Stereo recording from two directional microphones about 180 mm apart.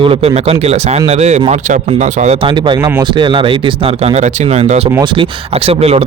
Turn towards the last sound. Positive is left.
turn(degrees=-35)  # may be behind; listen again after turning